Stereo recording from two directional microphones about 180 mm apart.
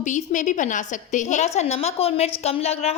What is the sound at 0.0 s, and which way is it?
A woman's voice, 40° left (ahead or behind).